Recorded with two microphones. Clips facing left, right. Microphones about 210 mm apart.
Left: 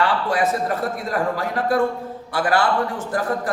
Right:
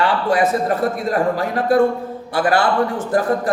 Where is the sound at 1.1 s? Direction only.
20° right (ahead or behind).